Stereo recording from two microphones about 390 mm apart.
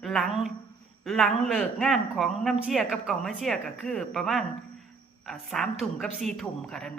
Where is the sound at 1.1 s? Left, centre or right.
Centre.